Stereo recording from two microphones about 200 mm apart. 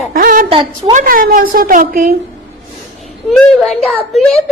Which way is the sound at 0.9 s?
45° right (ahead or behind).